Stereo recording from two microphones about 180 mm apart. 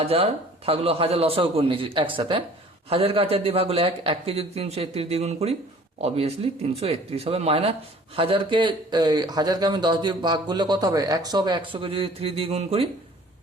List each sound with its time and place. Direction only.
0.0 s a man's voice: 35° right (ahead or behind)